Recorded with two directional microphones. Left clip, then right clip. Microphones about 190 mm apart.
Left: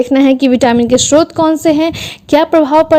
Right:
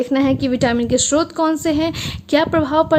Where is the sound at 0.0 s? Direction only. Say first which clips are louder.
Left 8 dB; 35° left (ahead or behind).